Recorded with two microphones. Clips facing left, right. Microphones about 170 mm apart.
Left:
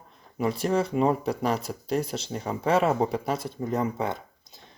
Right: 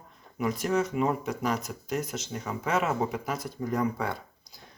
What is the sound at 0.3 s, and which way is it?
Speech, 30° left (ahead or behind).